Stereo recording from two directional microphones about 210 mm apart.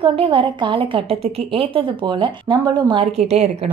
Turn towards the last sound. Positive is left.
turn(degrees=-30)  # may be behind; listen again after turning